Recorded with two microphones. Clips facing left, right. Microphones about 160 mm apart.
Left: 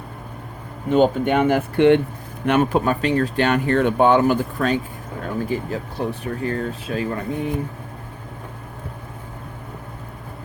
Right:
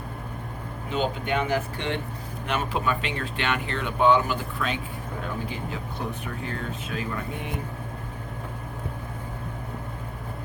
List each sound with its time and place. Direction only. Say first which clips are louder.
0.9 s speech: left 10 dB; 50° left (ahead or behind)
2.5 s speech: left 9 dB; 50° left (ahead or behind)
6.0 s speech: left 9 dB; 35° left (ahead or behind)